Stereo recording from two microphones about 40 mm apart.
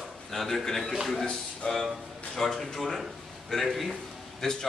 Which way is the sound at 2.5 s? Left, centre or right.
Centre.